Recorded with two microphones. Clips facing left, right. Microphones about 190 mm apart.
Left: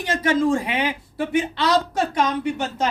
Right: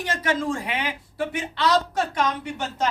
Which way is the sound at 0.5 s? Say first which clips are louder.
Left 6 dB; 20° left (ahead or behind).